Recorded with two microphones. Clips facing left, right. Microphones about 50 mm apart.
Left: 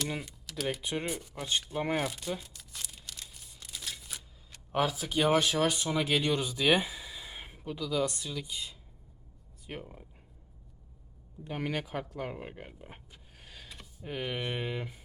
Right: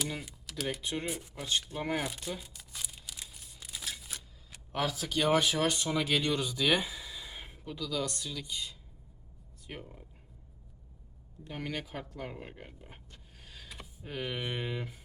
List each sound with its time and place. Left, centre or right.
0.1 s typing: centre
0.8 s speech: centre
1.0 s speech: centre
2.0 s tearing: centre
4.7 s speech: centre
11.4 s speech: centre
13.5 s a sound: centre
14.0 s speech: centre